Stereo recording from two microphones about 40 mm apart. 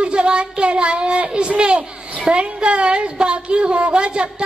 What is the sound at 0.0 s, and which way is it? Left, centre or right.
A woman's voice, right.